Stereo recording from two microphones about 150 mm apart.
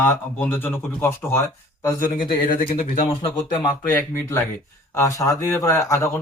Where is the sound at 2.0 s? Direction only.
70° left (ahead or behind).